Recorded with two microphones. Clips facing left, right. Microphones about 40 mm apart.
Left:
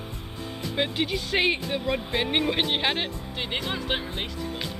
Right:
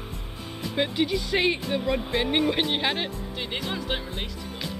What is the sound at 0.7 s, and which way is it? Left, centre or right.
Speech, centre.